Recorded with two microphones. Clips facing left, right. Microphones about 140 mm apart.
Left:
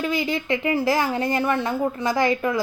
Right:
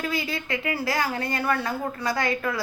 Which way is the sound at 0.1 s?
20° left (ahead or behind).